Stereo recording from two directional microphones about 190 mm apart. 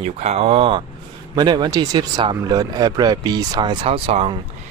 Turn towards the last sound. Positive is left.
turn(degrees=-30)  # may be behind; listen again after turning